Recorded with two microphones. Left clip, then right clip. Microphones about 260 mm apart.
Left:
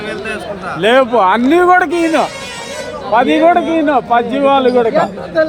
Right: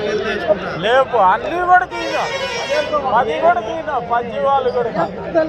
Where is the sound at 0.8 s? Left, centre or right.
Left.